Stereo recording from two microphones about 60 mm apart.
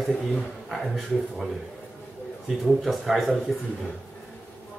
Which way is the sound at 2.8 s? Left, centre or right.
Centre.